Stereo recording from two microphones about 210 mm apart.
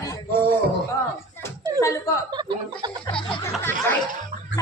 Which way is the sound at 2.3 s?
20° right (ahead or behind).